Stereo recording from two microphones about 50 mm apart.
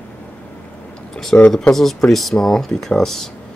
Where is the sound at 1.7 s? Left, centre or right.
Centre.